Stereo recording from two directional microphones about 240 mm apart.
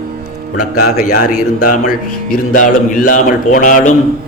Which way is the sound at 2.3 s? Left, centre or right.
Left.